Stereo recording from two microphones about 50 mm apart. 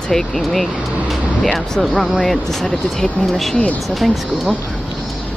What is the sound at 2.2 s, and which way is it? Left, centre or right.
Speech, centre.